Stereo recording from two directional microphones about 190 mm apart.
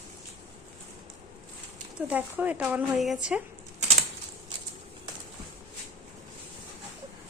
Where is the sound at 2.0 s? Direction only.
5° right (ahead or behind).